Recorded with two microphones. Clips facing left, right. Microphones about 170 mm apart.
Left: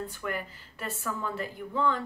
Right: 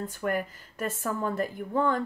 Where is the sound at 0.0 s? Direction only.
45° right (ahead or behind).